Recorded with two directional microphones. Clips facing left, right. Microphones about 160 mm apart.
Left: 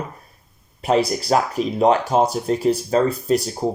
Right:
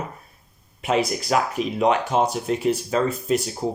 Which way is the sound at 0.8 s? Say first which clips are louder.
Left 4 dB; 35° left (ahead or behind).